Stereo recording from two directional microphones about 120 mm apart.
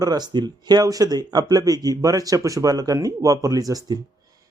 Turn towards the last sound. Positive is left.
turn(degrees=-30)  # may be behind; listen again after turning